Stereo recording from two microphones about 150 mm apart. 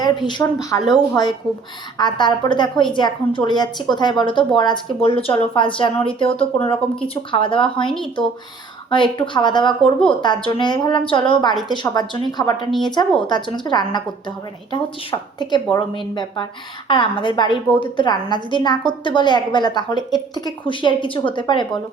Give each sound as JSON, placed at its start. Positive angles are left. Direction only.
{"t": 0.0, "sound": "a woman's voice", "side_deg": 30}
{"t": 8.9, "sound": "a woman's voice", "side_deg": 35}
{"t": 15.4, "sound": "a woman's voice", "side_deg": 30}